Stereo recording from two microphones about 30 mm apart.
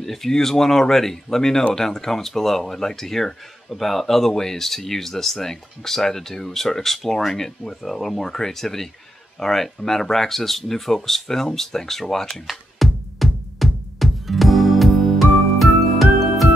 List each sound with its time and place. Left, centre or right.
0.0 s speech: centre
12.4 s music: centre